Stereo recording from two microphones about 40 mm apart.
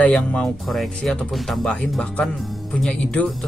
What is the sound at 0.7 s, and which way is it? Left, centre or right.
Speech, centre.